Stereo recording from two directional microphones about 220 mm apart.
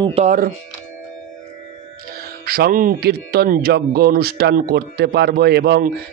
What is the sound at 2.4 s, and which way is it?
Speech, 40° right (ahead or behind).